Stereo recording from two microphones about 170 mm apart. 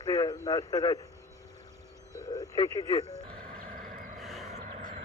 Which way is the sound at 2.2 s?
20° left (ahead or behind).